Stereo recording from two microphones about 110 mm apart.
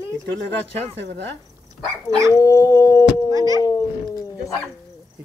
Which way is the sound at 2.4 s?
30° left (ahead or behind).